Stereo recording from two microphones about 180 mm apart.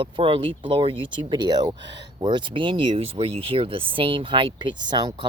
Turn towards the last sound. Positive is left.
turn(degrees=-25)  # may be behind; listen again after turning